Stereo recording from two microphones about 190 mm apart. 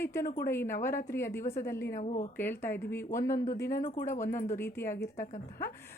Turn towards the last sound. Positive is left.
turn(degrees=10)  # may be behind; listen again after turning